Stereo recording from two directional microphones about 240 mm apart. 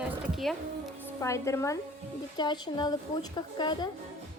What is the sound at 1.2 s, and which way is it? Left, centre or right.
A woman's voice, centre.